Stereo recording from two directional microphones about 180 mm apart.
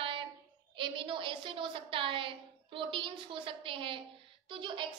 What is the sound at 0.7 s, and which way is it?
A woman's voice, 30° right (ahead or behind).